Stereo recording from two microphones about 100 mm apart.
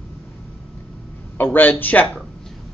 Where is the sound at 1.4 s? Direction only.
20° left (ahead or behind).